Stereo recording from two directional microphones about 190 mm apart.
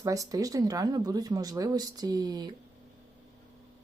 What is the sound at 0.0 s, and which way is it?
Speech, 15° right (ahead or behind).